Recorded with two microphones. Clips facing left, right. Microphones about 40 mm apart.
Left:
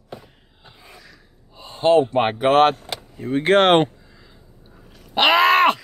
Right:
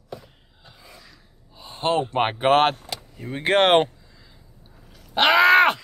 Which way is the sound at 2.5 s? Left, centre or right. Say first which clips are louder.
Left 3 dB; right.